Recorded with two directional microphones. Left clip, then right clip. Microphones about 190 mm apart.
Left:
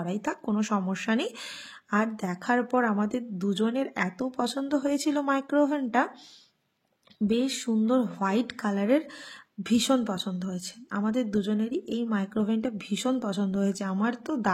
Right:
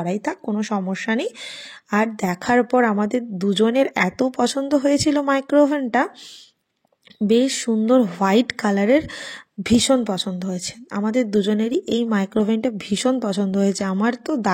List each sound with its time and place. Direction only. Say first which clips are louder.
0.0 s speech: right 7 dB; 30° right (ahead or behind)
7.2 s speech: right 10 dB; 35° right (ahead or behind)